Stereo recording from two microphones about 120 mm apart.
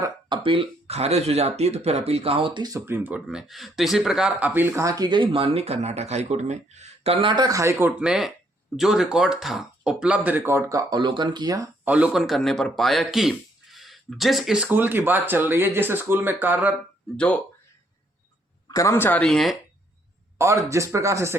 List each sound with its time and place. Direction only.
0.3 s speech: 45° right (ahead or behind)
2.8 s speech: 15° right (ahead or behind)
3.2 s speech: centre (ahead or behind); by 7.4 s 45° right (ahead or behind)
7.4 s speech: 25° right (ahead or behind)
11.9 s speech: 10° right (ahead or behind)
12.1 s speech: centre (ahead or behind)
17.2 s speech: 15° left (ahead or behind)
18.7 s speech: 25° left (ahead or behind)
19.2 s speech: centre (ahead or behind)
20.4 s speech: 25° right (ahead or behind)